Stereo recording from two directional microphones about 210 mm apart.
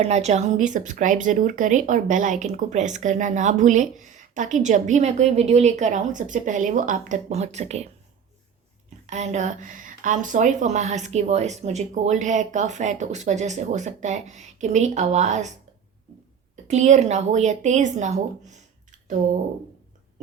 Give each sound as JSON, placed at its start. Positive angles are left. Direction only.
{"t": 0.0, "sound": "speech", "side_deg": -30}
{"t": 9.0, "sound": "speech", "side_deg": -35}
{"t": 16.6, "sound": "speech", "side_deg": -35}